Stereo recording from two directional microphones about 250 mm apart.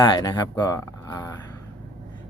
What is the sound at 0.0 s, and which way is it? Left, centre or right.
Speech, centre.